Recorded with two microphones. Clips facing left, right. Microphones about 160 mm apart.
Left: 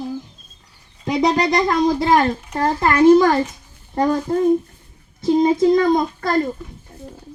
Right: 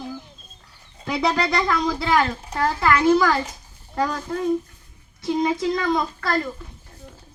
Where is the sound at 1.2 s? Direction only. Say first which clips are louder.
Left 4 dB; 40° left (ahead or behind).